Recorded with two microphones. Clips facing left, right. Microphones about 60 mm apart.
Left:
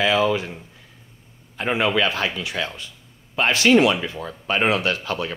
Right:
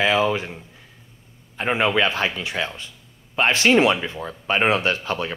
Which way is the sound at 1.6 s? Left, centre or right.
Right.